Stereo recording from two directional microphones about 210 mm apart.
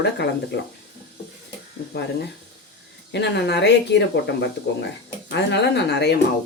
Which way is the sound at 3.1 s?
55° left (ahead or behind).